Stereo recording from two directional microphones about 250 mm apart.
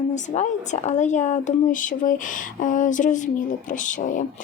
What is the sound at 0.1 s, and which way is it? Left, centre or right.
Speech, left.